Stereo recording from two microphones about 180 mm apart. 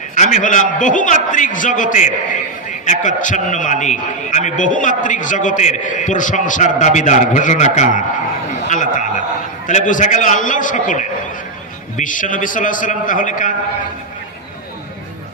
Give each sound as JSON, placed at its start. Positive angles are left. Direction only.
{"t": 0.1, "sound": "a man's voice", "side_deg": 40}